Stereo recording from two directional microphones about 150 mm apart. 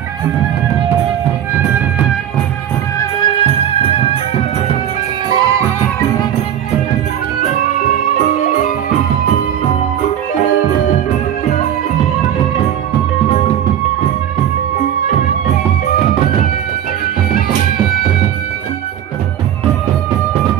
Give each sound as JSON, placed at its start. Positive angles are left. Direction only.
{"t": 3.9, "sound": "music", "side_deg": 40}
{"t": 5.3, "sound": "music", "side_deg": -25}